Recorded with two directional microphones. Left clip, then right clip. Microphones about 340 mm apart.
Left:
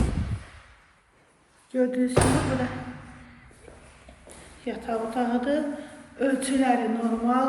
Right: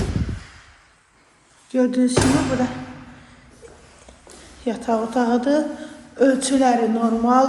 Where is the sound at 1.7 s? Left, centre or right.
Centre.